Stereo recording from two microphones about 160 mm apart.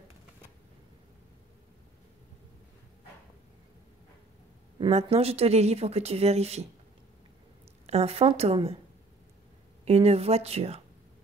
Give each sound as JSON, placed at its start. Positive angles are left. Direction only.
{"t": 4.7, "sound": "speech", "side_deg": -35}
{"t": 7.8, "sound": "speech", "side_deg": -40}
{"t": 9.8, "sound": "speech", "side_deg": -40}